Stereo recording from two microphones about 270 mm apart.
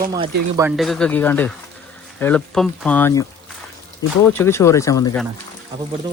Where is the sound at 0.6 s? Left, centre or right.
Centre.